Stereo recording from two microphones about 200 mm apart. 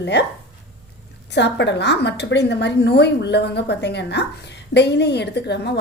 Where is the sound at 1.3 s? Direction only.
60° left (ahead or behind).